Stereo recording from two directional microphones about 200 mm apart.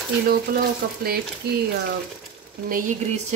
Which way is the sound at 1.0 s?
50° right (ahead or behind).